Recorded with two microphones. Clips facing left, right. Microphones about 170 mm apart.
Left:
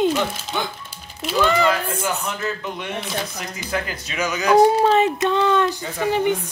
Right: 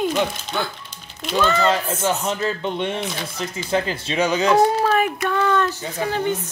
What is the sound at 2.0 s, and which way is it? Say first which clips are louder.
Speech: right 3 dB; 30° right (ahead or behind).